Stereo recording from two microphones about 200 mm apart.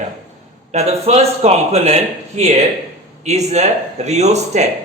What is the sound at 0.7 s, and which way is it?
A man's voice, 35° right (ahead or behind).